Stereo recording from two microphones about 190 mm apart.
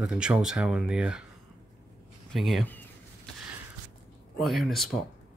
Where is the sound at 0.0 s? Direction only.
5° right (ahead or behind).